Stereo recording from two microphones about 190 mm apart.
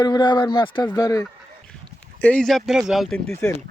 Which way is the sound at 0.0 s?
20° left (ahead or behind).